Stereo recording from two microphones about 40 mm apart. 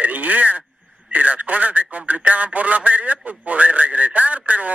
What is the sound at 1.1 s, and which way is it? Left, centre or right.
Radio, right.